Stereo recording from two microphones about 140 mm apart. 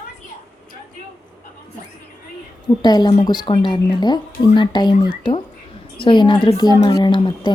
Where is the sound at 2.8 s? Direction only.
30° left (ahead or behind).